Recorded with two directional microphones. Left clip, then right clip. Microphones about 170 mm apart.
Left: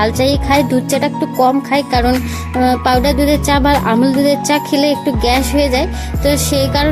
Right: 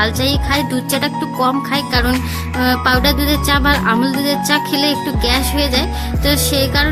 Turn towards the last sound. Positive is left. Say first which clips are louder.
# left 1 dB
turn(degrees=20)  # may be behind; listen again after turning